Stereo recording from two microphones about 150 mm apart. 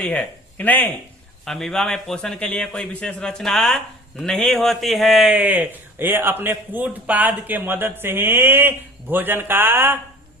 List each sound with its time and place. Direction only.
0.0 s a man's voice: 10° left (ahead or behind); by 10.0 s 15° right (ahead or behind)